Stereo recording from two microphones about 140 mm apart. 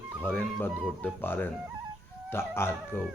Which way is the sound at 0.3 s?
15° left (ahead or behind).